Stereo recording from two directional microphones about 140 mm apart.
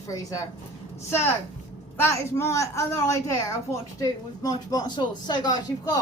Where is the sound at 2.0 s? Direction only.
15° left (ahead or behind).